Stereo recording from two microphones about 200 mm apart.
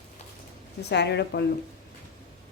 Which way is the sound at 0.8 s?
55° left (ahead or behind).